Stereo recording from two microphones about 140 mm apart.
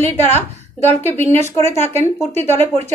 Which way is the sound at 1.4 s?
50° right (ahead or behind).